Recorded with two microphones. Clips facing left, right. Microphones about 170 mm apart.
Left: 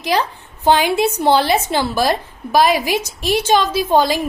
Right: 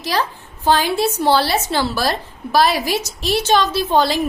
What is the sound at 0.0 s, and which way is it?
A woman's voice, 15° left (ahead or behind).